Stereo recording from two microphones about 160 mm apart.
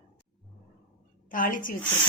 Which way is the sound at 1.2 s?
55° left (ahead or behind).